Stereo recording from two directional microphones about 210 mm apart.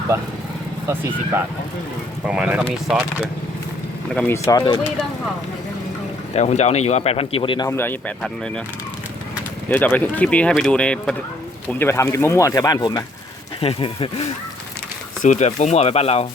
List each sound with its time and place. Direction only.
2.2 s speech: 5° right (ahead or behind)
4.1 s speech: 10° left (ahead or behind)
6.3 s speech: 30° left (ahead or behind)
7.7 s speech: 10° left (ahead or behind)
9.6 s speech: 10° left (ahead or behind); by 16.2 s 30° left (ahead or behind)